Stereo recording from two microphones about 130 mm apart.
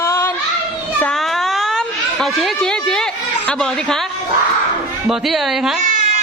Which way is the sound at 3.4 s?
5° left (ahead or behind).